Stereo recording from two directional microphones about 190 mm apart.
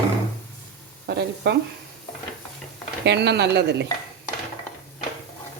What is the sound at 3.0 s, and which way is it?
Speech, 65° right (ahead or behind).